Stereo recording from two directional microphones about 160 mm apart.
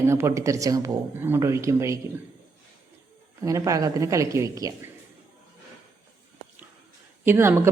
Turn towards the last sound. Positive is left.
turn(degrees=-15)  # may be behind; listen again after turning